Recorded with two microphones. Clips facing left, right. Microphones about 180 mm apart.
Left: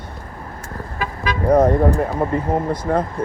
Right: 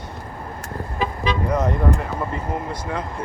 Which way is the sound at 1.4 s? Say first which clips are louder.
Left 9 dB; 55° left (ahead or behind).